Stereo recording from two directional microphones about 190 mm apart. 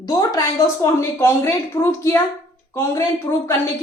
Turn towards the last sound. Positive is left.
turn(degrees=15)  # may be behind; listen again after turning